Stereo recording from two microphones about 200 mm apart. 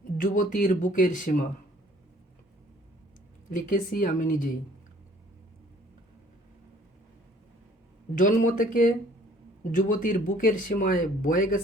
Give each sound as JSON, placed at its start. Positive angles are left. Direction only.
{"t": 0.2, "sound": "speech", "side_deg": 40}
{"t": 3.5, "sound": "speech", "side_deg": 40}
{"t": 8.1, "sound": "speech", "side_deg": 40}